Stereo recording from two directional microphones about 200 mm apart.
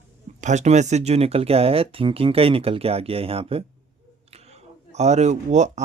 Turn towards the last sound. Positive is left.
turn(degrees=-35)  # may be behind; listen again after turning